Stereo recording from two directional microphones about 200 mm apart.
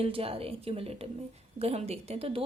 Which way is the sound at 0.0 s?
30° right (ahead or behind).